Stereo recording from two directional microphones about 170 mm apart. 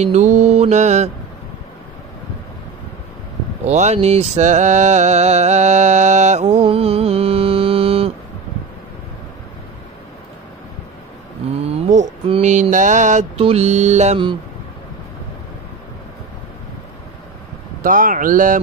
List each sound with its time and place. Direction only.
0.0 s mantra: 45° right (ahead or behind)
3.6 s mantra: 40° right (ahead or behind)
11.5 s mantra: 35° right (ahead or behind)
17.8 s speech: 50° right (ahead or behind)